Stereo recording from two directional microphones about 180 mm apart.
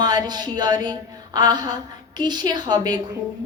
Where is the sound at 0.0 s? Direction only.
25° right (ahead or behind).